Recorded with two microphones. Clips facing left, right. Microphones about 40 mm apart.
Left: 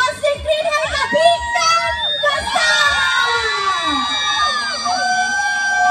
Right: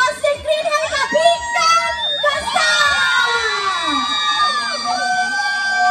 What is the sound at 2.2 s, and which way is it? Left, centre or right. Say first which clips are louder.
Screaming: even; centre.